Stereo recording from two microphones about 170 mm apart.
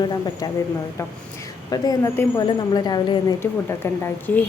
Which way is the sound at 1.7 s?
20° left (ahead or behind).